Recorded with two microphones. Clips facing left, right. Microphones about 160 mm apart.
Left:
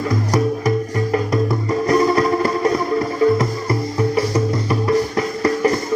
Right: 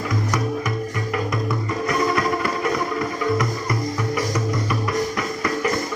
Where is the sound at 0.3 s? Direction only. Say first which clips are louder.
Left 8 dB; 35° left (ahead or behind).